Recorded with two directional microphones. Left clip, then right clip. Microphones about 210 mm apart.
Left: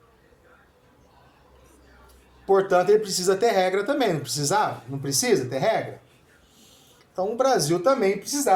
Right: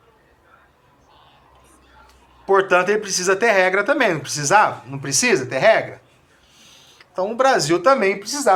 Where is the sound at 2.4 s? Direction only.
35° right (ahead or behind).